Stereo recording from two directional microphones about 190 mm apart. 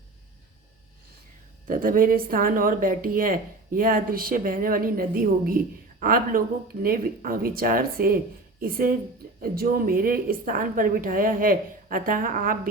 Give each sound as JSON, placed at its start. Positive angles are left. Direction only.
{"t": 1.6, "sound": "speech", "side_deg": -45}